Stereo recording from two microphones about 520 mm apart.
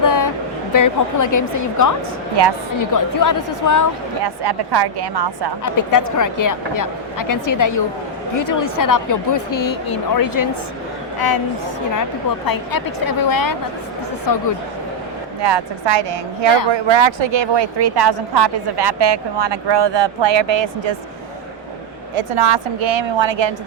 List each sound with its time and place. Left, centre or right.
0.0 s a sound: left
0.7 s speech: left
4.2 s speech: right
5.6 s speech: left
12.5 s speech: left
15.4 s speech: right
22.1 s speech: right